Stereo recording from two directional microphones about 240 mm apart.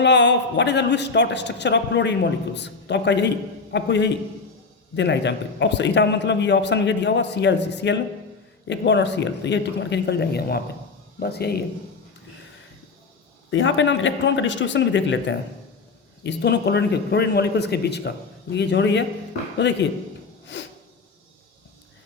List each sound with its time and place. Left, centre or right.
0.0 s a man's voice: left
13.5 s a man's voice: left
20.5 s a sound: left